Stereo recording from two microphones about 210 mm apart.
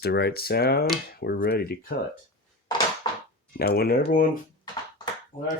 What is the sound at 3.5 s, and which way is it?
Speech, 45° left (ahead or behind).